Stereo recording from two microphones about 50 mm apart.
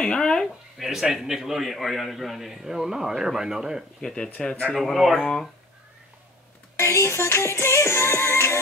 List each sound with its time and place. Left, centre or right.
0.1 s speech: centre
0.7 s a man's voice: centre
4.0 s speech: centre
4.7 s a man's voice: centre
6.8 s music: left